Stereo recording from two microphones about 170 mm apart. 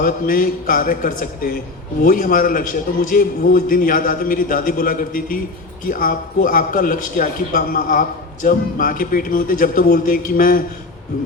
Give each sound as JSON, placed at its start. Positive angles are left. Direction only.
{"t": 0.0, "sound": "a man's voice", "side_deg": 55}